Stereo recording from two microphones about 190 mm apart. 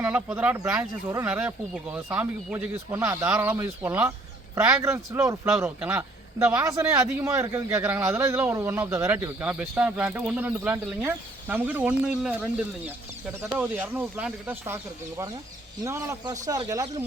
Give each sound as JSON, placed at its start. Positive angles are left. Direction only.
{"t": 0.0, "sound": "a man's voice", "side_deg": -10}
{"t": 15.8, "sound": "a man's voice", "side_deg": -15}